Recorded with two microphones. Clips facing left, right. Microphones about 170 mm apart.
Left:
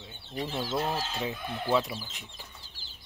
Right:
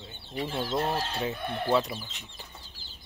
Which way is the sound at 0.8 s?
60° right (ahead or behind).